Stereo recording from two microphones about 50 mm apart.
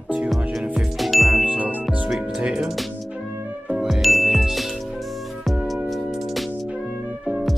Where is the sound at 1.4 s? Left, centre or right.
Right.